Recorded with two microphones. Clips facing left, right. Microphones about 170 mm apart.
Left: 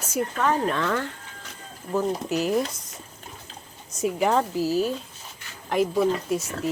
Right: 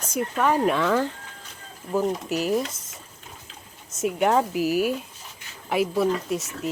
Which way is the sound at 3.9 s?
Centre (ahead or behind).